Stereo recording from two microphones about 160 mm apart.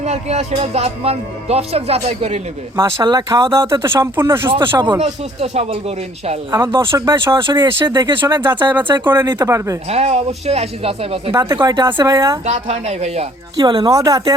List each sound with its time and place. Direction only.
0.0 s speech: 45° right (ahead or behind)
2.7 s speech: 25° right (ahead or behind)
4.9 s speech: 40° right (ahead or behind)
6.7 s speech: 20° right (ahead or behind)
8.7 s speech: 10° right (ahead or behind)
9.9 s speech: 40° right (ahead or behind)
11.3 s speech: 20° right (ahead or behind)
12.5 s speech: 40° right (ahead or behind)
13.6 s speech: 25° right (ahead or behind)